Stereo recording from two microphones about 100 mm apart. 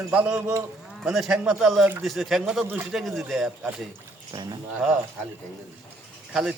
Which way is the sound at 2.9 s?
Centre (ahead or behind).